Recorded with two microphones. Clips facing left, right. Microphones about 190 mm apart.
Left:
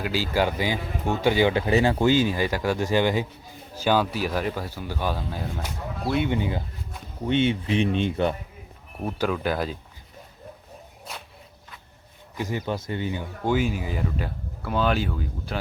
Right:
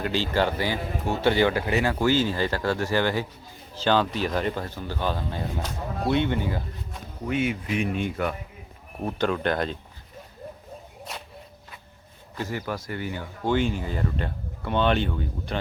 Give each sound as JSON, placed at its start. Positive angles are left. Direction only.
{"t": 0.0, "sound": "speech", "side_deg": 5}
{"t": 6.2, "sound": "speech", "side_deg": 15}
{"t": 7.3, "sound": "speech", "side_deg": 25}
{"t": 9.0, "sound": "speech", "side_deg": 5}
{"t": 12.4, "sound": "speech", "side_deg": 20}